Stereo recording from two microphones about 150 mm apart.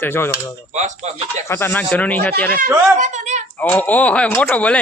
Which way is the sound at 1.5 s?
15° left (ahead or behind).